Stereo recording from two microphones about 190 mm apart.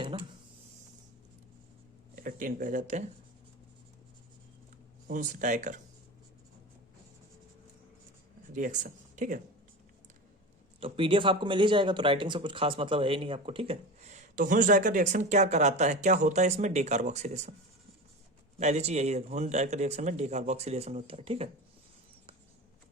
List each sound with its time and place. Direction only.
2.2 s speech: 45° right (ahead or behind)
5.0 s speech: 45° right (ahead or behind)
8.5 s speech: 40° right (ahead or behind)
10.8 s speech: 30° right (ahead or behind)
18.6 s speech: 35° right (ahead or behind)